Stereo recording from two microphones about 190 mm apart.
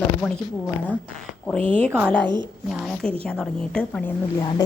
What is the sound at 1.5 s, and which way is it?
A woman's voice, 5° left (ahead or behind).